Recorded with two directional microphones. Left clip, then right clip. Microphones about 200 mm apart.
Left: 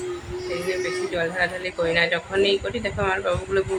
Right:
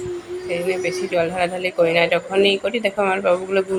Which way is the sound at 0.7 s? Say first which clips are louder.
Right 3 dB; 15° right (ahead or behind).